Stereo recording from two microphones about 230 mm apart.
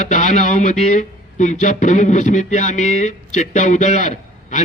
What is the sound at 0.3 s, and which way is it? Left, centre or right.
A man's voice, left.